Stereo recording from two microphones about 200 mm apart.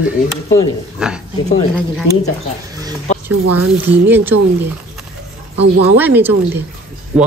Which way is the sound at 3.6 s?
10° right (ahead or behind).